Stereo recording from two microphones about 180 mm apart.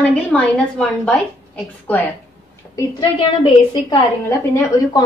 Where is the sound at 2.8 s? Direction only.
25° left (ahead or behind).